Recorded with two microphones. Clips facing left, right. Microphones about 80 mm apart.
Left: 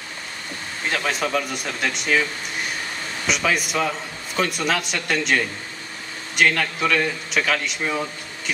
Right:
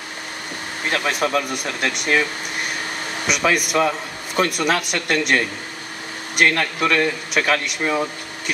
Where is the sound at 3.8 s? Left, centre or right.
Centre.